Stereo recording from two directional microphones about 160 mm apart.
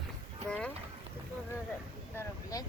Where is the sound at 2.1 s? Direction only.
20° left (ahead or behind).